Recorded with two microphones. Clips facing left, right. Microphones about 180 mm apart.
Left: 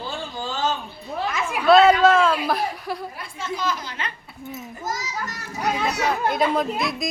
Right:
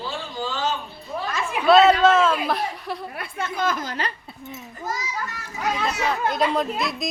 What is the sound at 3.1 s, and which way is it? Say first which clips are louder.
A woman's voice: right 1 dB; 60° right (ahead or behind).